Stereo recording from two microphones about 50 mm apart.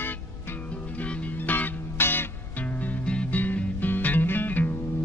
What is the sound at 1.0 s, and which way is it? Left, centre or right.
Music, left.